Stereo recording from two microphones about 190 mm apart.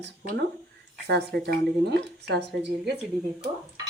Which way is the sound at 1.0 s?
60° right (ahead or behind).